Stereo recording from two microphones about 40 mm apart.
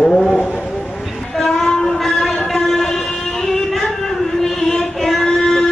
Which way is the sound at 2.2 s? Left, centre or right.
Centre.